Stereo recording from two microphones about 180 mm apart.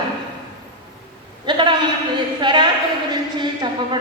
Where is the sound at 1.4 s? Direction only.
25° right (ahead or behind).